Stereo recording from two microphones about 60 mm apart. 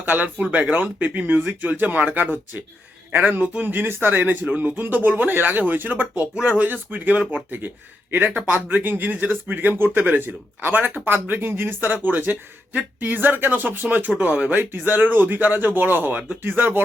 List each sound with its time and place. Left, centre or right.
0.0 s speech: right
6.3 s speech: centre
6.7 s speech: right
14.5 s speech: right